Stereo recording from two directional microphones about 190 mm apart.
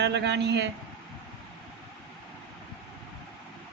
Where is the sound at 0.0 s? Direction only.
65° right (ahead or behind).